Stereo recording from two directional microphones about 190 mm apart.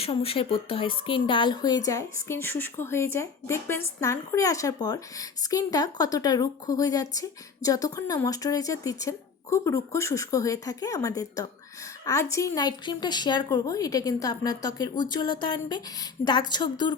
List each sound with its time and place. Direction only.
0.0 s a woman's voice: 30° left (ahead or behind)